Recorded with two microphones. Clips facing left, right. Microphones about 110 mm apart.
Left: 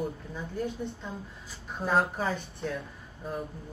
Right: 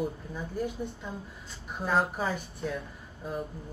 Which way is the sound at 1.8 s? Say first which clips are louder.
Left 1 dB; centre (ahead or behind).